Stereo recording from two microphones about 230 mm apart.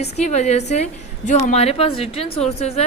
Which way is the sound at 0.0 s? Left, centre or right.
Left.